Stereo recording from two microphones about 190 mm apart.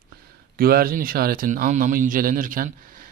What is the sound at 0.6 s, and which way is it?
A man's voice, 50° right (ahead or behind).